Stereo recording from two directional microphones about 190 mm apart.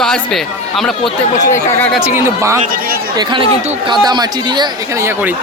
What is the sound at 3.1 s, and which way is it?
Speech, 25° right (ahead or behind).